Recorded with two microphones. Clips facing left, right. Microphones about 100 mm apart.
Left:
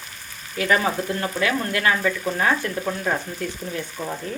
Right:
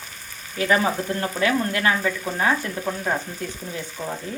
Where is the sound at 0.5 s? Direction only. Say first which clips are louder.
Even; 25° right (ahead or behind).